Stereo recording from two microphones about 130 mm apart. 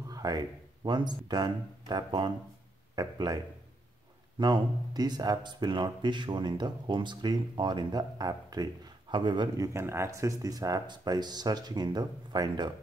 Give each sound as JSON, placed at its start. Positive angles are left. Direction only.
{"t": 0.1, "sound": "speech", "side_deg": -30}
{"t": 4.4, "sound": "speech", "side_deg": -30}
{"t": 9.8, "sound": "speech", "side_deg": -20}